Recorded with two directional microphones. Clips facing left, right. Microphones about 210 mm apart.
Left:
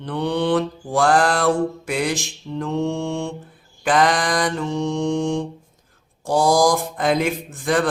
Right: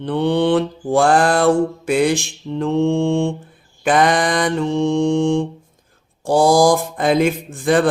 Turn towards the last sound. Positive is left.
turn(degrees=-25)  # may be behind; listen again after turning